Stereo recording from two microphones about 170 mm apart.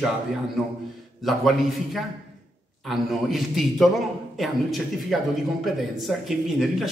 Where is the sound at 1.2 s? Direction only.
Centre (ahead or behind).